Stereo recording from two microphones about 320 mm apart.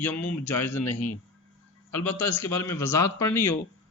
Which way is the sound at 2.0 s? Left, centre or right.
Centre.